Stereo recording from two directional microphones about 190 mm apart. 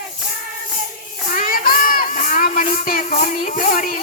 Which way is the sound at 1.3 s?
45° left (ahead or behind).